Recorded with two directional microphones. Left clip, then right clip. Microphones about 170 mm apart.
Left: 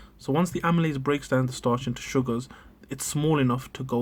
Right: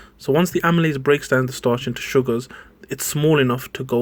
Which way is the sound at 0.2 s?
15° right (ahead or behind).